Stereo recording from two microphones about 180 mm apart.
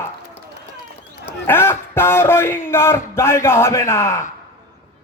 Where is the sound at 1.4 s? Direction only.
10° left (ahead or behind).